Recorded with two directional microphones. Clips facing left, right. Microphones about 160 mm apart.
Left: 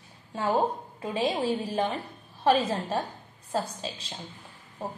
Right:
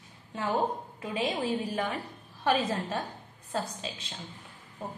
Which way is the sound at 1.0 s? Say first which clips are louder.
Left 4 dB; 30° left (ahead or behind).